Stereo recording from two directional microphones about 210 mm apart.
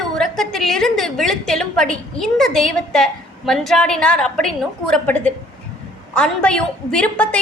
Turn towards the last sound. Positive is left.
turn(degrees=5)  # may be behind; listen again after turning